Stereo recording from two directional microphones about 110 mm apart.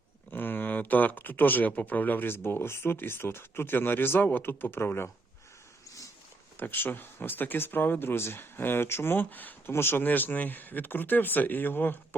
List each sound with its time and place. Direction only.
0.3 s speech: 15° left (ahead or behind)
6.6 s speech: 20° left (ahead or behind)